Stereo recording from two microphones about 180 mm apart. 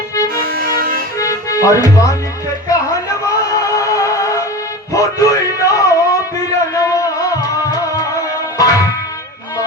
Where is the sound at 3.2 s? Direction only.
20° left (ahead or behind).